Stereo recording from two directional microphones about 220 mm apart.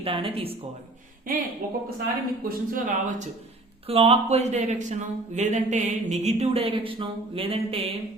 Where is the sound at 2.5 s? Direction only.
40° right (ahead or behind).